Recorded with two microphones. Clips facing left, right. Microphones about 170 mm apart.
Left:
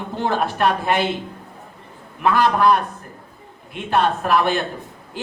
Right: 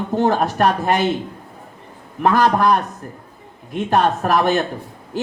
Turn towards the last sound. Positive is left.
turn(degrees=-45)  # may be behind; listen again after turning